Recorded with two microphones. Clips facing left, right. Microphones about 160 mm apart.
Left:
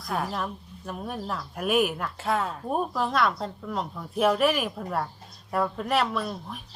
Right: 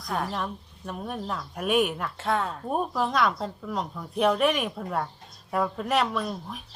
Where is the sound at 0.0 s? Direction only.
Centre (ahead or behind).